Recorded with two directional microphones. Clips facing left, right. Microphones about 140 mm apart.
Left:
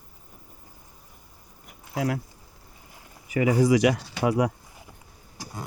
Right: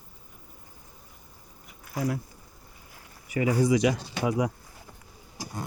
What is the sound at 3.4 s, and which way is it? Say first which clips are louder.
Speech: left 3 dB; 90° left.